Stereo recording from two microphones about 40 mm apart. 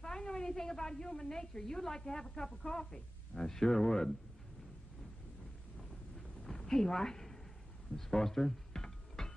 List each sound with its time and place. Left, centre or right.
0.0 s a woman's voice: centre
5.8 s a sound: centre
7.9 s music: centre